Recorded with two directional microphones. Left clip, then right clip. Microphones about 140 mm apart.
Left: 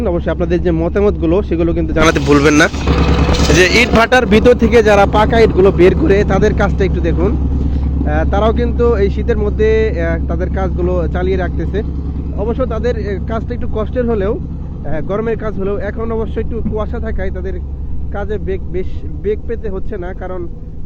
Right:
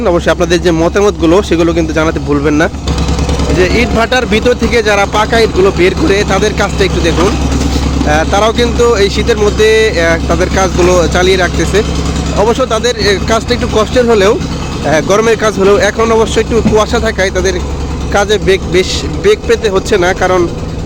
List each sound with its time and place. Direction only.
0.3 s speech: 35° right (ahead or behind)
2.0 s speech: 5° right (ahead or behind)
5.1 s speech: 15° right (ahead or behind)